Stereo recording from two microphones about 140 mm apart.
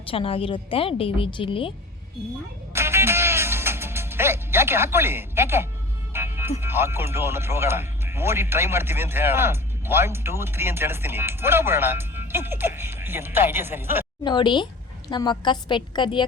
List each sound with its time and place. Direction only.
0.1 s a woman's voice: 40° left (ahead or behind)
2.7 s music: 20° right (ahead or behind)
6.6 s speech: 15° right (ahead or behind)
14.3 s a woman's voice: 35° left (ahead or behind)